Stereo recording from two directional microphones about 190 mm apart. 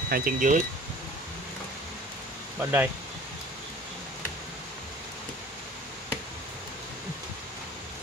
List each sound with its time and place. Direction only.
0.1 s speech: 45° right (ahead or behind)
2.6 s speech: 10° right (ahead or behind)